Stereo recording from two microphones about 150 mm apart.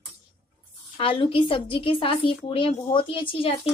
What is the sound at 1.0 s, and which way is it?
Speech, 35° left (ahead or behind).